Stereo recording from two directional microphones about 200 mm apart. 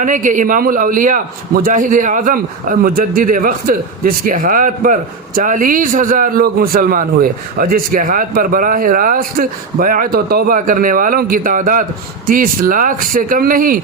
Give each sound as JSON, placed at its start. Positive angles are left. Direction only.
{"t": 0.0, "sound": "a man's voice", "side_deg": -40}